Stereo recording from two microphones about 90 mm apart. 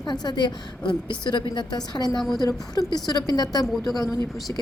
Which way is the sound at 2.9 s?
50° left (ahead or behind).